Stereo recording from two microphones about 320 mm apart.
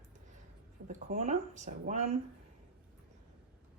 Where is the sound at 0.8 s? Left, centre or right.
Right.